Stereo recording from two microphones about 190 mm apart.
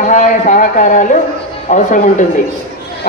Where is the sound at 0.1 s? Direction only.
40° left (ahead or behind).